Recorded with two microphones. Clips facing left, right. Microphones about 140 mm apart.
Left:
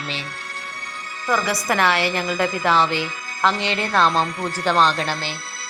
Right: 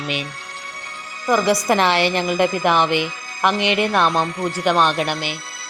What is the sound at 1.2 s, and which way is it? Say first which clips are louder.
A woman's voice: right 5 dB; 20° right (ahead or behind).